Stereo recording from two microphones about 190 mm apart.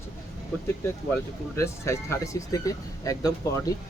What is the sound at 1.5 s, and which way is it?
Speech, 15° left (ahead or behind).